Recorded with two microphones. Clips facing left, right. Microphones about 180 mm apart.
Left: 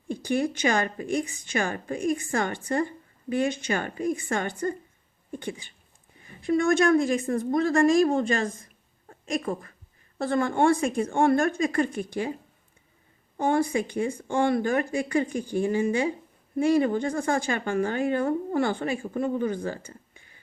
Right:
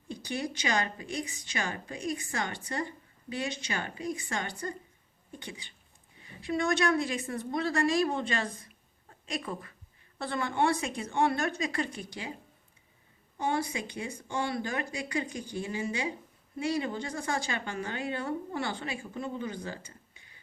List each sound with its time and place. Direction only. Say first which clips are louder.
0.1 s a woman's voice: left 9 dB; 50° left (ahead or behind)
13.3 s speech: left 8 dB; 50° left (ahead or behind)